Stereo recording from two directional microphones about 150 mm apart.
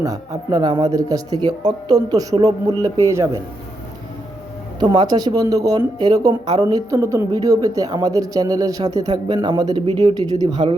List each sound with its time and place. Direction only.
0.0 s speech: 25° right (ahead or behind)
4.8 s speech: 30° right (ahead or behind)